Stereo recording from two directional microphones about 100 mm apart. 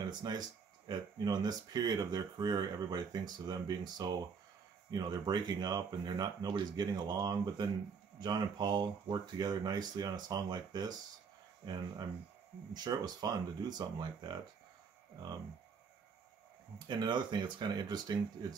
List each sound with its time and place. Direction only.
0.2 s speech: 45° right (ahead or behind)
16.7 s speech: 45° right (ahead or behind)